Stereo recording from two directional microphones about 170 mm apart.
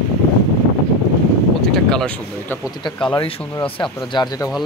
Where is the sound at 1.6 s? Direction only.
5° left (ahead or behind).